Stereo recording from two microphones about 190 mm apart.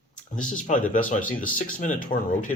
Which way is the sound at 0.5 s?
45° left (ahead or behind).